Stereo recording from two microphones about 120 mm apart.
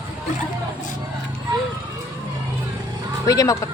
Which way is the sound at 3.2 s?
30° left (ahead or behind).